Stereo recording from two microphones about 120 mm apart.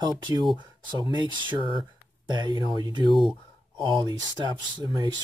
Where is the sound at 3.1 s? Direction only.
Centre (ahead or behind).